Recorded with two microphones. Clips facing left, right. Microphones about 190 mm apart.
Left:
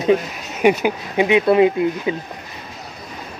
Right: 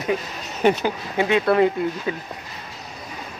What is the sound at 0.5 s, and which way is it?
Speech, 15° left (ahead or behind).